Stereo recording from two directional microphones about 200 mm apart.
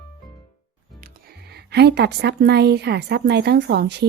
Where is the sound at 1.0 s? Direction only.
50° right (ahead or behind).